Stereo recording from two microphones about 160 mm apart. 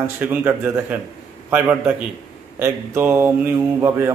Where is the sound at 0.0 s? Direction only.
10° right (ahead or behind).